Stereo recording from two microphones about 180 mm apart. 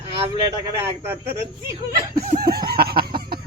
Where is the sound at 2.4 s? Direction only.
60° right (ahead or behind).